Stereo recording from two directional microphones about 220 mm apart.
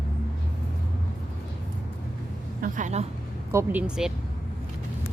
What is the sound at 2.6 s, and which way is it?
Speech, 35° right (ahead or behind).